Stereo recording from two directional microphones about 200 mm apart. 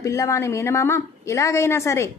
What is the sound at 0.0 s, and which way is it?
A woman's voice, 15° left (ahead or behind).